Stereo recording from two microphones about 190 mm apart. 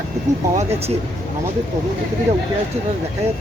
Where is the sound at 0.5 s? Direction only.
35° right (ahead or behind).